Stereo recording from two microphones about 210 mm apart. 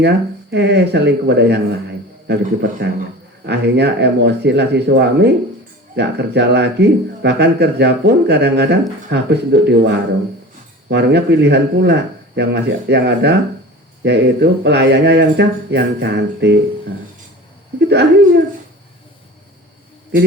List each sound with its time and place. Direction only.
0.5 s speech: 55° right (ahead or behind)
17.7 s speech: 55° right (ahead or behind)